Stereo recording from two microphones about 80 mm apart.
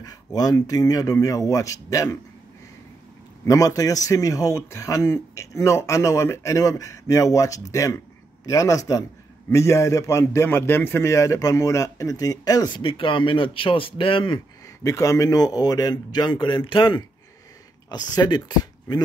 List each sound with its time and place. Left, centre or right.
0.0 s speech: left
3.4 s a man's voice: left
12.7 s a man's voice: left
14.8 s speech: left
17.8 s speech: left